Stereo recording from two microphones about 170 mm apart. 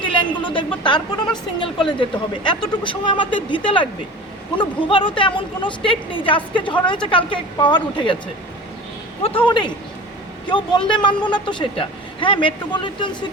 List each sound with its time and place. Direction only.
0.0 s speech: 30° left (ahead or behind)
9.5 s speech: 25° left (ahead or behind)